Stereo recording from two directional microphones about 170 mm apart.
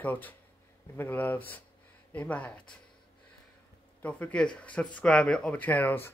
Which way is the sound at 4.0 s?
10° left (ahead or behind).